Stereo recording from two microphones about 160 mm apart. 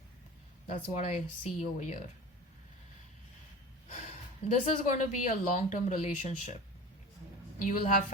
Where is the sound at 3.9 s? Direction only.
45° left (ahead or behind).